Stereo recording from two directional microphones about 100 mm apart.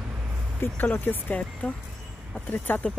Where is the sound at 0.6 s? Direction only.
20° left (ahead or behind).